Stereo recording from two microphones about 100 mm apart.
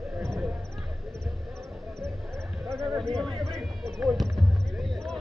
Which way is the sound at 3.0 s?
5° left (ahead or behind).